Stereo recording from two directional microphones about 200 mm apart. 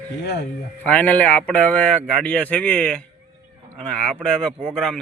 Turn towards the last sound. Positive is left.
turn(degrees=5)  # may be behind; listen again after turning